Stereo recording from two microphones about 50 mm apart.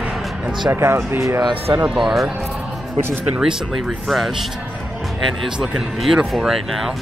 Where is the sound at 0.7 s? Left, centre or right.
Right.